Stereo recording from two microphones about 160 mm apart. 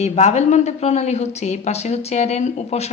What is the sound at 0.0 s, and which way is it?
A woman's voice, 45° left (ahead or behind).